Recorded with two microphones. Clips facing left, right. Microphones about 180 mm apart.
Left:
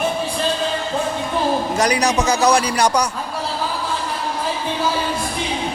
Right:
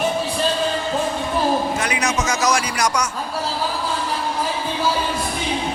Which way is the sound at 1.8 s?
35° left (ahead or behind).